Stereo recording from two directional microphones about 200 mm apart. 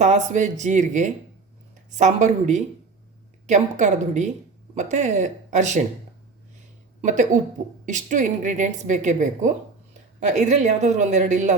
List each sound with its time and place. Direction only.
0.0 s a woman's voice: 35° right (ahead or behind)
7.0 s a woman's voice: 40° right (ahead or behind)